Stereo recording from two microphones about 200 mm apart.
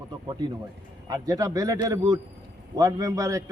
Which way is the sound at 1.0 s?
15° right (ahead or behind).